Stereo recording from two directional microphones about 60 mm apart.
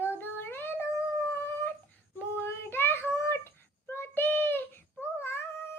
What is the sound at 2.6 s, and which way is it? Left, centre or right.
Child singing, left.